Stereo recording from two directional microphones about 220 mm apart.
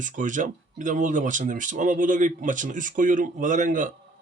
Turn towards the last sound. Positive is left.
turn(degrees=-35)  # may be behind; listen again after turning